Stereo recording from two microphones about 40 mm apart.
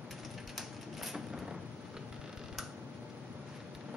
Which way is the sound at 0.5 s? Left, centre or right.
Centre.